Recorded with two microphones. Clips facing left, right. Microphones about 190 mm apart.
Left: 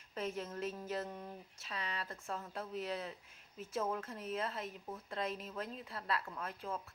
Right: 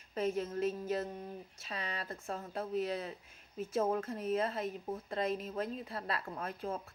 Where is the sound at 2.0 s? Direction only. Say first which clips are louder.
Right 3 dB; 35° right (ahead or behind).